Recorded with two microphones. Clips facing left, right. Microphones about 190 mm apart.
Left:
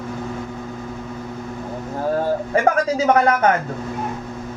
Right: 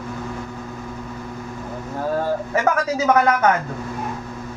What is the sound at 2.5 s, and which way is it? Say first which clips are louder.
Speech: left 4 dB; 35° left (ahead or behind).